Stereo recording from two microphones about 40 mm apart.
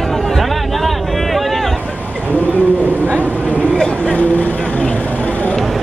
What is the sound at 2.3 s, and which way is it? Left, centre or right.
Bird, left.